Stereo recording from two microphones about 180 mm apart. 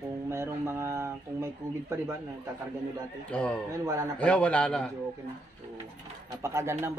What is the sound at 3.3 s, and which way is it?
Speech, 5° left (ahead or behind).